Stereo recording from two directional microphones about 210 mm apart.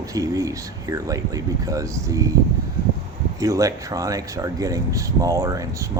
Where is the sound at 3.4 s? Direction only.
15° right (ahead or behind).